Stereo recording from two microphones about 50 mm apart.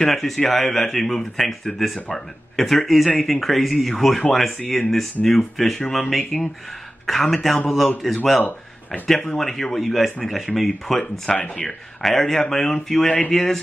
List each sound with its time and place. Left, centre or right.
0.0 s speech: centre
8.4 s speech: left
9.4 s speech: centre